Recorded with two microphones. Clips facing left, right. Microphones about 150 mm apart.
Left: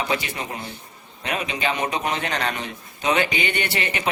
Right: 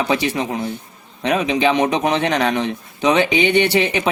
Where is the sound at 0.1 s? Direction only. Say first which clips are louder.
Right 7 dB; 90° right.